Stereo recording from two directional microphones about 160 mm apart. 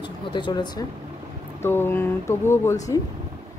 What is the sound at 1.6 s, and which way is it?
Speech, 15° left (ahead or behind).